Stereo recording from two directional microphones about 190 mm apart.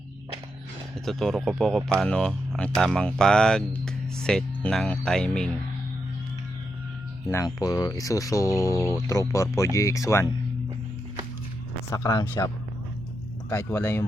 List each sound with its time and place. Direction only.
0.9 s speech: centre (ahead or behind)
7.3 s speech: 15° left (ahead or behind)
11.9 s speech: 15° left (ahead or behind)
13.5 s speech: 15° left (ahead or behind)